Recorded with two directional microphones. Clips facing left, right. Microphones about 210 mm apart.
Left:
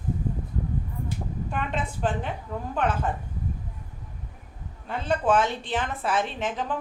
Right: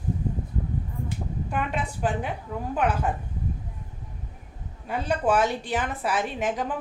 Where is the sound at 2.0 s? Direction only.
10° right (ahead or behind).